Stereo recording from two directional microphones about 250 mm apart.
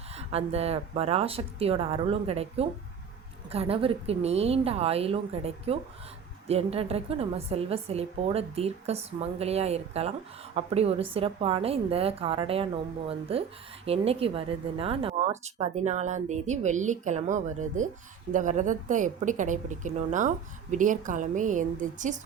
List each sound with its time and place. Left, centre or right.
0.2 s a woman's voice: right